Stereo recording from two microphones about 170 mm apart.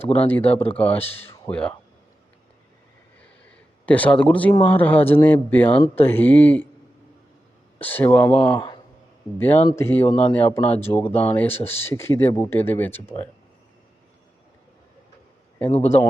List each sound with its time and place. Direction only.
0.2 s speech: 10° left (ahead or behind)
3.8 s speech: 10° left (ahead or behind)
5.7 s speech: 35° left (ahead or behind)
6.0 s speech: 10° left (ahead or behind)
7.8 s speech: 10° left (ahead or behind)
8.5 s speech: 25° left (ahead or behind)
9.4 s speech: 10° left (ahead or behind)